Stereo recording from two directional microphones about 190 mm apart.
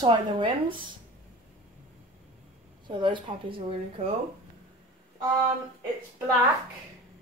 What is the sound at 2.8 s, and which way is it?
A woman's voice, 25° right (ahead or behind).